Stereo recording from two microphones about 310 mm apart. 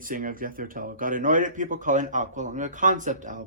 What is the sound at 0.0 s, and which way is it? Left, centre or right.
Speech, right.